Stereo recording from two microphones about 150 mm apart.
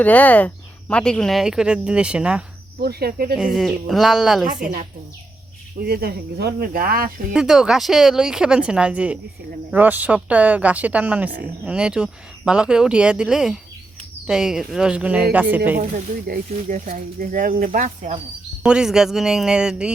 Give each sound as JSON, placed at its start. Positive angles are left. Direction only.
{"t": 0.0, "sound": "speech", "side_deg": 10}
{"t": 2.8, "sound": "cricket", "side_deg": -90}
{"t": 3.3, "sound": "speech", "side_deg": 0}
{"t": 5.8, "sound": "speech", "side_deg": -90}
{"t": 7.3, "sound": "speech", "side_deg": -5}
{"t": 15.8, "sound": "speech", "side_deg": -65}
{"t": 18.6, "sound": "speech", "side_deg": -5}